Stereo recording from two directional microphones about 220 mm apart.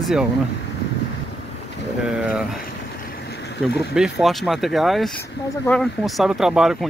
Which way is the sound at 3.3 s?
50° left (ahead or behind).